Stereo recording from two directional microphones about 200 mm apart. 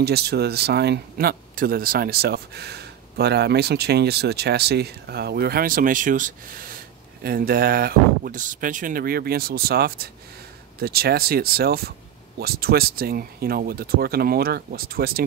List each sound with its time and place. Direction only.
0.0 s speech: 55° right (ahead or behind)